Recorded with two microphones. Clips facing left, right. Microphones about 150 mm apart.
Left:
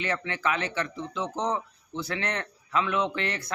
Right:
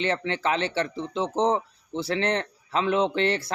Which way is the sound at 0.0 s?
30° right (ahead or behind).